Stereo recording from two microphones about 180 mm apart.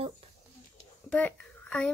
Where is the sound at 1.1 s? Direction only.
10° left (ahead or behind).